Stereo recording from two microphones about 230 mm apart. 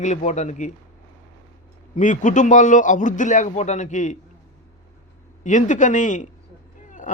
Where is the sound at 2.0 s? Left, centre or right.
Left.